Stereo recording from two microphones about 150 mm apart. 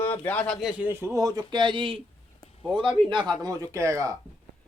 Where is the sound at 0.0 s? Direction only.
10° left (ahead or behind); by 3.3 s 30° right (ahead or behind).